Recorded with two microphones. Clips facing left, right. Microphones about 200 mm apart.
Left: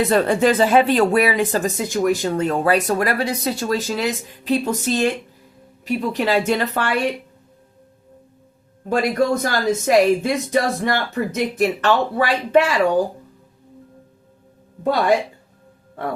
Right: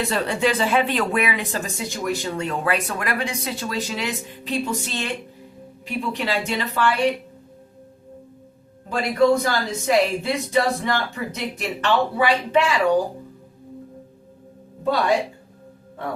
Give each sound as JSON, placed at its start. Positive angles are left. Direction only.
{"t": 0.0, "sound": "speech", "side_deg": 45}
{"t": 8.9, "sound": "speech", "side_deg": 45}